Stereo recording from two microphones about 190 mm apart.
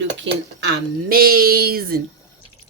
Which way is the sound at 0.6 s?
50° right (ahead or behind).